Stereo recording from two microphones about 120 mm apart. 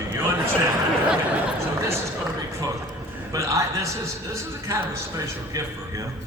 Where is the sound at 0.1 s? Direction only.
20° right (ahead or behind).